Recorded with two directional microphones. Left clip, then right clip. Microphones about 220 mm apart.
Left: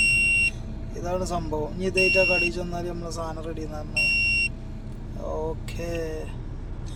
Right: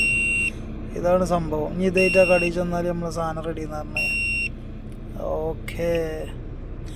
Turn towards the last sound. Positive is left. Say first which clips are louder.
# right 7 dB
turn(degrees=-10)  # may be behind; listen again after turning